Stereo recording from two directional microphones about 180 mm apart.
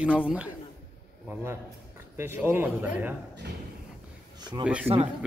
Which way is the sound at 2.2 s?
15° right (ahead or behind).